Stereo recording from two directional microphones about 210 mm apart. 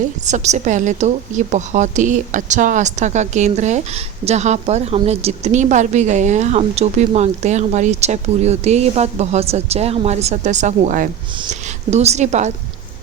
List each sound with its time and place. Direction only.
0.3 s a woman's voice: 35° right (ahead or behind)